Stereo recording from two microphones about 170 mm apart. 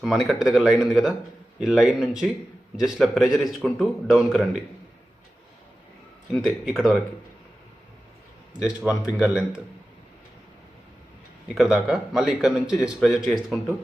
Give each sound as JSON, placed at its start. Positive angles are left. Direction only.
{"t": 0.0, "sound": "a man's voice", "side_deg": 0}
{"t": 6.3, "sound": "a man's voice", "side_deg": 0}
{"t": 8.6, "sound": "a man's voice", "side_deg": -5}
{"t": 11.5, "sound": "a man's voice", "side_deg": -5}